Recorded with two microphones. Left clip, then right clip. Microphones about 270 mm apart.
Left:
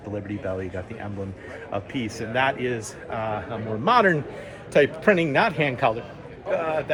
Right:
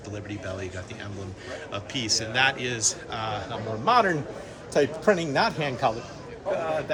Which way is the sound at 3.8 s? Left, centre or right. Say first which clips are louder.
Left 3 dB; left.